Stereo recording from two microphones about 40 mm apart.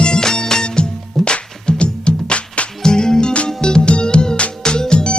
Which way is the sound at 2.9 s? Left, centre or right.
Centre.